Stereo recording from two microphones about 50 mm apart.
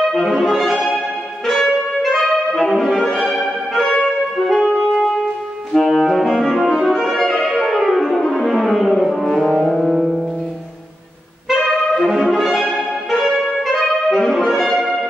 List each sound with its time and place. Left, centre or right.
0.1 s music: centre
3.8 s music: left
4.4 s music: centre
8.3 s brass instrument: centre
9.8 s music: centre
12.3 s music: centre